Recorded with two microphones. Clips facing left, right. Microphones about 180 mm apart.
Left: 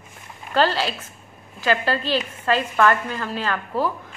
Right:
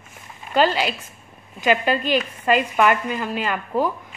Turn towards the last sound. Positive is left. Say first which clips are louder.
# right 2 dB
turn(degrees=-15)  # may be behind; listen again after turning